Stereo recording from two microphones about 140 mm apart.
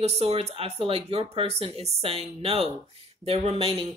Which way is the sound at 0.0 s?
50° right (ahead or behind).